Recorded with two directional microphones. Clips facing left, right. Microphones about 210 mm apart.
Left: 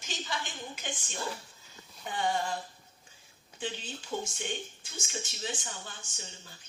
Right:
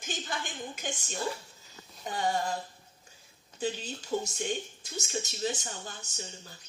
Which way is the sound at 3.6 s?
40° right (ahead or behind).